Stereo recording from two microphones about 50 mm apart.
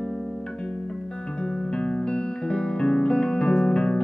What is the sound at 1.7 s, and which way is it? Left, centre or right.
Music, centre.